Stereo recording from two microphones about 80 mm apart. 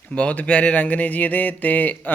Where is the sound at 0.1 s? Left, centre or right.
Centre.